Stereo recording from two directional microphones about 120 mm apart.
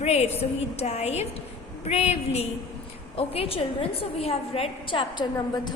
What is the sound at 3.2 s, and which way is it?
A woman's voice, 55° left (ahead or behind).